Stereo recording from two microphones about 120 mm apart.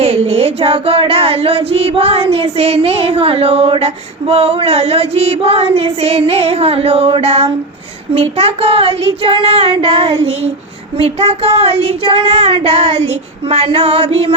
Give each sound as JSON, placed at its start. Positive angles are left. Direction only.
{"t": 0.0, "sound": "female singing", "side_deg": -60}
{"t": 8.1, "sound": "child singing", "side_deg": -60}
{"t": 10.9, "sound": "female singing", "side_deg": -55}